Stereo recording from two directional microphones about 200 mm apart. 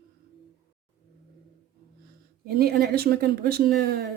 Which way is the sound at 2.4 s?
50° right (ahead or behind).